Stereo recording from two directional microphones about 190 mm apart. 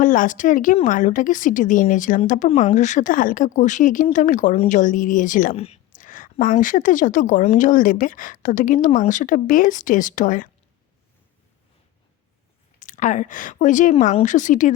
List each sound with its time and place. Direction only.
0.0 s a woman's voice: 45° left (ahead or behind)
12.8 s a woman's voice: 40° left (ahead or behind)